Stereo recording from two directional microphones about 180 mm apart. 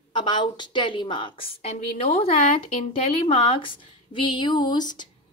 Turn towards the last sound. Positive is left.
turn(degrees=25)  # may be behind; listen again after turning